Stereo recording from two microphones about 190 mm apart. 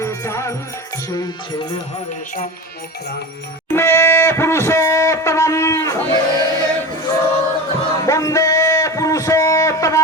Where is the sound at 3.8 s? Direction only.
10° left (ahead or behind).